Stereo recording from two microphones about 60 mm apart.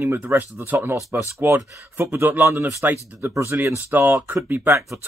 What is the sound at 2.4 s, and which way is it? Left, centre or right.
Speech, right.